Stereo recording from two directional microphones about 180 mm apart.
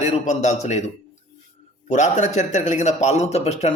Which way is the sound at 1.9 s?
40° left (ahead or behind).